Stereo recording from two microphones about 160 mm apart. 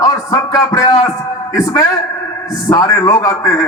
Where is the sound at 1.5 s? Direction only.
15° left (ahead or behind).